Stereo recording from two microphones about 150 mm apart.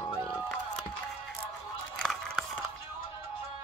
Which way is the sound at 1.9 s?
5° left (ahead or behind).